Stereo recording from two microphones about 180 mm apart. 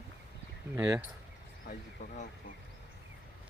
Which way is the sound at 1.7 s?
45° left (ahead or behind).